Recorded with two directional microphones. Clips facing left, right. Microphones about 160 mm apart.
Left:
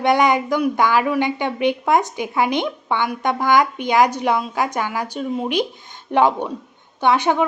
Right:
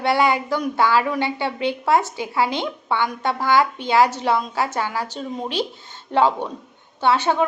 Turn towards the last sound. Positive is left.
turn(degrees=15)  # may be behind; listen again after turning